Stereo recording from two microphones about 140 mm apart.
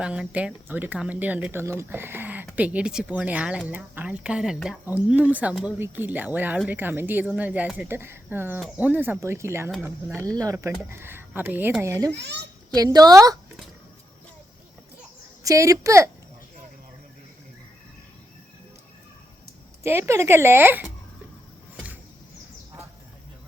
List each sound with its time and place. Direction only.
0.0 s speech: 5° right (ahead or behind); by 13.3 s 25° right (ahead or behind)
15.4 s speech: 25° right (ahead or behind)
19.8 s speech: 20° right (ahead or behind)